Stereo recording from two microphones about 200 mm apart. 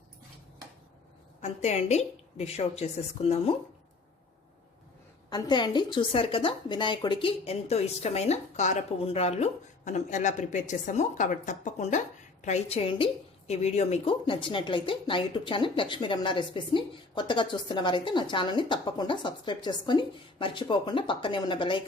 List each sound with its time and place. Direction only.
1.4 s a woman's voice: 35° left (ahead or behind)
5.3 s a woman's voice: 20° left (ahead or behind)